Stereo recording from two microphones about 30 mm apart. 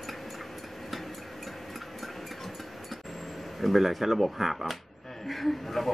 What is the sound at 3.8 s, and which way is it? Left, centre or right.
Speech, centre.